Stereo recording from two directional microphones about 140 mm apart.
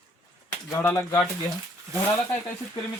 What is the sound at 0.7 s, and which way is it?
Speech, 20° left (ahead or behind).